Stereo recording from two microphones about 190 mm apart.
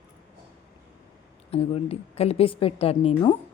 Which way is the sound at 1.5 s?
30° left (ahead or behind).